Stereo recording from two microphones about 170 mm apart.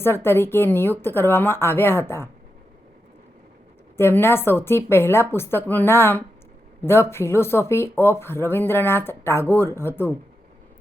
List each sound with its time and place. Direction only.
0.0 s speech: 15° left (ahead or behind)
3.9 s speech: 15° left (ahead or behind)